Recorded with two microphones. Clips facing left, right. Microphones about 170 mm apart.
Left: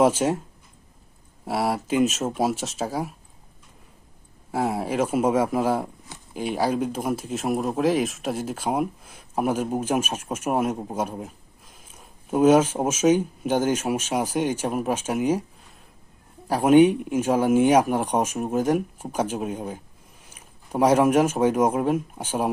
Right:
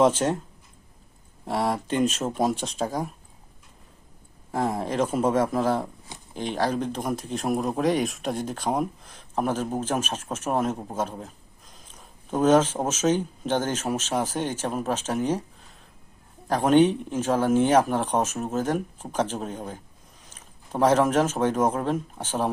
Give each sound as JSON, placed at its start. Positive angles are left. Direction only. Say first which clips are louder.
{"t": 0.0, "sound": "speech", "louder": "left 1 dB", "side_deg": 10}
{"t": 1.5, "sound": "speech", "louder": "left 1 dB", "side_deg": 10}
{"t": 4.5, "sound": "speech", "louder": "left 1 dB", "side_deg": 10}
{"t": 16.5, "sound": "speech", "louder": "left 3 dB", "side_deg": 10}